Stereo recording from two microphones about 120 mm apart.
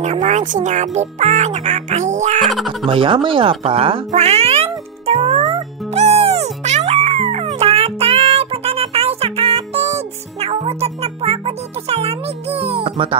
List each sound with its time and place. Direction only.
0.0 s speech: 80° right
2.4 s speech: centre (ahead or behind)
2.9 s speech: 45° right (ahead or behind)
4.1 s music: 60° right (ahead or behind)